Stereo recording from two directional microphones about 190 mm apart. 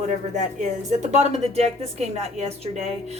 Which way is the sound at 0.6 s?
35° right (ahead or behind).